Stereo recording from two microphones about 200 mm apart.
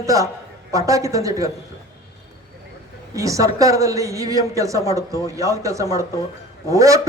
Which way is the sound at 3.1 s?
15° right (ahead or behind).